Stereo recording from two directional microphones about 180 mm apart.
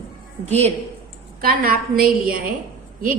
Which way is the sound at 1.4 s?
55° right (ahead or behind).